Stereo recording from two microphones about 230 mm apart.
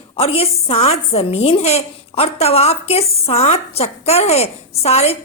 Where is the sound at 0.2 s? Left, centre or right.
Left.